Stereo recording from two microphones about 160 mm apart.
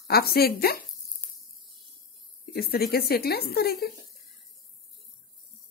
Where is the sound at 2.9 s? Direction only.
75° left (ahead or behind).